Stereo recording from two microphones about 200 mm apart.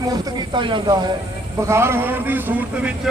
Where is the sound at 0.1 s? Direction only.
20° right (ahead or behind).